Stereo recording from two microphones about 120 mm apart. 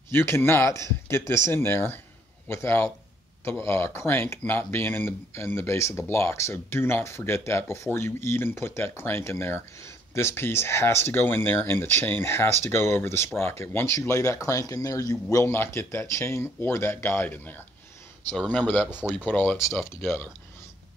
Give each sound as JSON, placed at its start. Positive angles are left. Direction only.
{"t": 0.1, "sound": "speech", "side_deg": 20}
{"t": 15.3, "sound": "speech", "side_deg": 20}
{"t": 18.9, "sound": "speech", "side_deg": -10}
{"t": 19.1, "sound": "speech", "side_deg": 15}